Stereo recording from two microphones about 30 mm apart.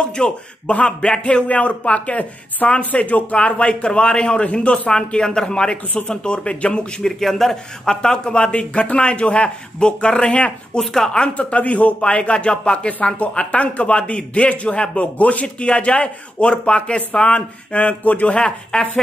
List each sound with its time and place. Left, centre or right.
0.0 s speech: left
1.0 s a man's voice: left
3.4 s speech: left
4.9 s speech: left
7.0 s speech: centre
7.8 s speech: left
8.2 s speech: left
10.8 s speech: centre
11.3 s a man's voice: left
12.2 s a man's voice: left
15.1 s a man's voice: left
15.4 s speech: left
18.0 s speech: left
18.3 s speech: left